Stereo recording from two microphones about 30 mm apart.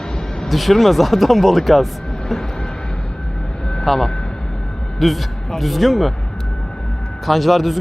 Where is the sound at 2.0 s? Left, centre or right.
Left.